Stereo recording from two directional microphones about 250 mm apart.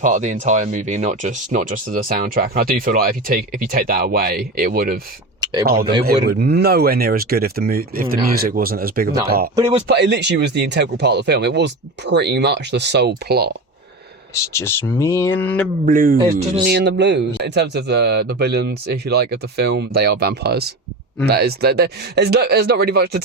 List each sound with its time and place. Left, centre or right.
0.0 s speech: right
5.4 s a sound: centre
6.1 s speech: right
9.6 s speech: right
9.8 s speech: right
14.6 s speech: centre
15.9 s speech: right
16.6 s speech: right